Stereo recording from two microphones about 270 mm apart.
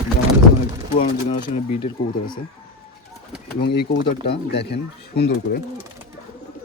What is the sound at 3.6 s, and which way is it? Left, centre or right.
Speech, left.